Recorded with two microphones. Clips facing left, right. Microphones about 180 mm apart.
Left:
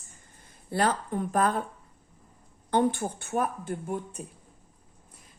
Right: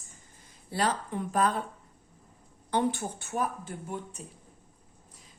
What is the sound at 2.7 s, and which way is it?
A woman's voice, 50° left (ahead or behind).